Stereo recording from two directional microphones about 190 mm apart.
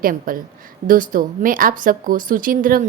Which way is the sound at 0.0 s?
45° right (ahead or behind).